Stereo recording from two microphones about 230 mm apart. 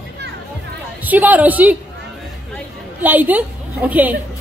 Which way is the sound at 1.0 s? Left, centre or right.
Centre.